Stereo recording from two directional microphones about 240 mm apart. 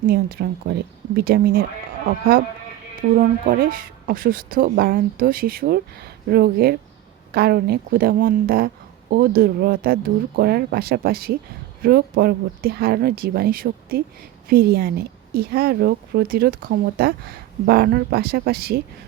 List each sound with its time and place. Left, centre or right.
0.1 s a woman's voice: right